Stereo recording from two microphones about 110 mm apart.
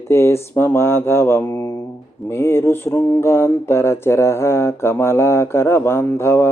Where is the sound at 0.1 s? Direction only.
25° left (ahead or behind).